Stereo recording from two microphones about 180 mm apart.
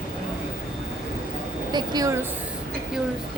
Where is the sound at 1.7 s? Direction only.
20° right (ahead or behind).